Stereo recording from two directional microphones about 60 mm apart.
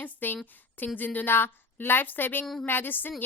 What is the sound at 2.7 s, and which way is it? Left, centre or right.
Speech, left.